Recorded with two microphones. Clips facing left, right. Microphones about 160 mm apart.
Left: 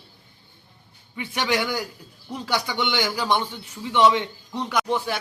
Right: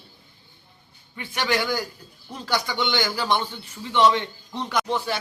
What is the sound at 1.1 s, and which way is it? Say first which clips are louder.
A man's voice: left 1 dB; 15° left (ahead or behind).